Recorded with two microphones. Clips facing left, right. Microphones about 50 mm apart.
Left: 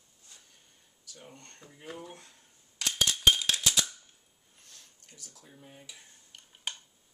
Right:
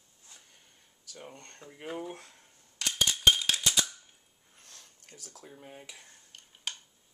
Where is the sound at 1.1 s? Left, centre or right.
Right.